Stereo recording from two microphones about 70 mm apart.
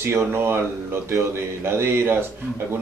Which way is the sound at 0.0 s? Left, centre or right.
Right.